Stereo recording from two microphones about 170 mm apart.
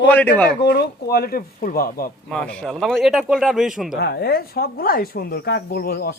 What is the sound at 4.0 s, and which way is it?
Speech, 70° left (ahead or behind).